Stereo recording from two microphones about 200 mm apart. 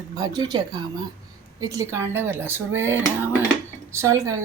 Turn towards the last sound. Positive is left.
turn(degrees=-15)  # may be behind; listen again after turning